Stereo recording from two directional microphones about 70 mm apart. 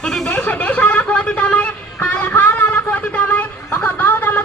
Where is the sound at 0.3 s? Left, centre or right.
Centre.